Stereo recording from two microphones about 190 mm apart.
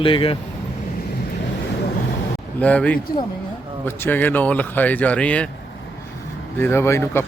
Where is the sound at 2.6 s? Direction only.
5° left (ahead or behind).